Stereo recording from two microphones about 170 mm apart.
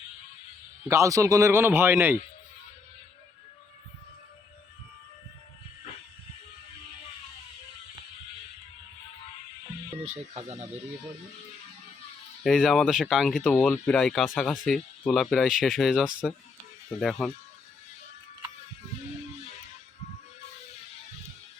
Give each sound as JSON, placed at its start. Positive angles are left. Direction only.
{"t": 0.9, "sound": "a man's voice", "side_deg": -20}
{"t": 10.3, "sound": "speech", "side_deg": -35}
{"t": 12.4, "sound": "speech", "side_deg": 0}